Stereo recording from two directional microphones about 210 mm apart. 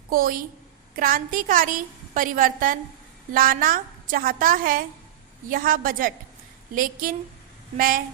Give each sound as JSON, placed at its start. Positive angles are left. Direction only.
{"t": 0.1, "sound": "a woman's voice", "side_deg": -45}